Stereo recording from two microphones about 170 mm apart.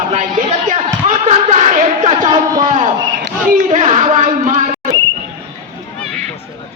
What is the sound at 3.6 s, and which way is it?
Speech, 40° right (ahead or behind).